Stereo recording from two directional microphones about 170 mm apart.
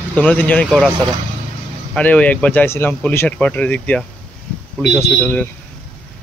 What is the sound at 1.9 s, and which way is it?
Speech, 10° left (ahead or behind).